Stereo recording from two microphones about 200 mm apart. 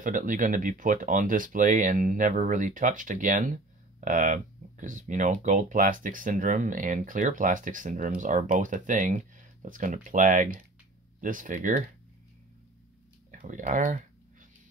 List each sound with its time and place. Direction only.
0.0 s speech: 40° right (ahead or behind)
13.3 s speech: 40° right (ahead or behind)